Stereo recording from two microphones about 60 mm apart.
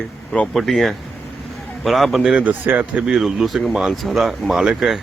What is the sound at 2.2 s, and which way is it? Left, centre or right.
Speech, centre.